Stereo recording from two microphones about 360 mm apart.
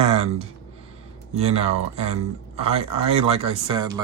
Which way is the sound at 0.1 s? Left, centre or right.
Centre.